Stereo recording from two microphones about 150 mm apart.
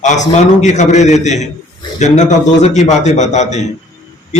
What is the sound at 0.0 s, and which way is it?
A man's voice, 55° left (ahead or behind).